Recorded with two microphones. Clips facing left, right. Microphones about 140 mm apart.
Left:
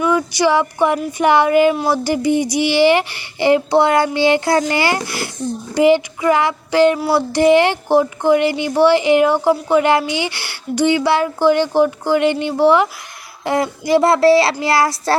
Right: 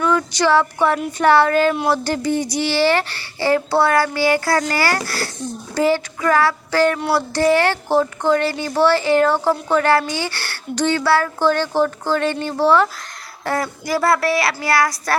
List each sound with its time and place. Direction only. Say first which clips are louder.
0.0 s a child's voice: left 2 dB; 10° left (ahead or behind); by 15.1 s 25° left (ahead or behind)